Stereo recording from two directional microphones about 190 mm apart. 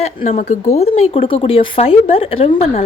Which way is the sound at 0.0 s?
40° left (ahead or behind).